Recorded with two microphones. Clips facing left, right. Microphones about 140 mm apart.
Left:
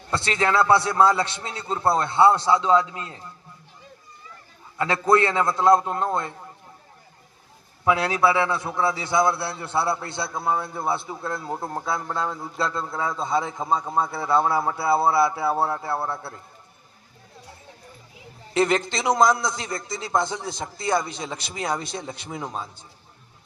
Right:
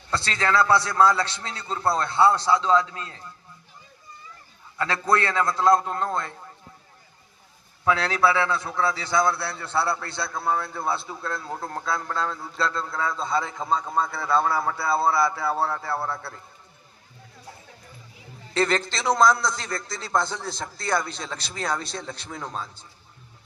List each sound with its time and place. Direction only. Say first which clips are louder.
0.1 s a man's voice: left 2 dB; 20° left (ahead or behind)
4.8 s a man's voice: left 4 dB; 20° left (ahead or behind)
7.9 s a man's voice: left 1 dB; 20° left (ahead or behind)
18.5 s a man's voice: left 2 dB; 20° left (ahead or behind)